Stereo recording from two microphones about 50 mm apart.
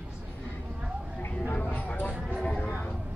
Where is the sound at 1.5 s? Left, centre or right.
Left.